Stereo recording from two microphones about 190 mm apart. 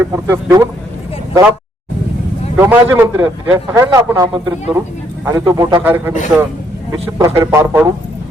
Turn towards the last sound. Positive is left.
turn(degrees=-15)  # may be behind; listen again after turning